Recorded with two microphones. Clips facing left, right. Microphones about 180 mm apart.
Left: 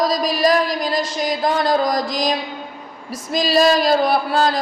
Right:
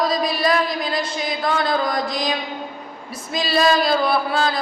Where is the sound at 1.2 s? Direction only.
40° left (ahead or behind).